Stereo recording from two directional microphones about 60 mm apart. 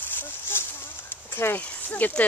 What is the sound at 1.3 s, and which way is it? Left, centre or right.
Speech, left.